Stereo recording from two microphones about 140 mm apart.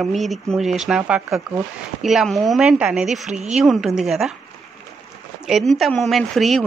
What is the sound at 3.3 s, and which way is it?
Speech, 55° right (ahead or behind).